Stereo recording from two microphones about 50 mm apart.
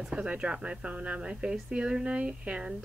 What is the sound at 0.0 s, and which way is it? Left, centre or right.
Speech, centre.